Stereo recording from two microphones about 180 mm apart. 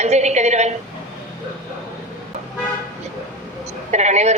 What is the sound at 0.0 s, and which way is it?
Speech, 40° right (ahead or behind).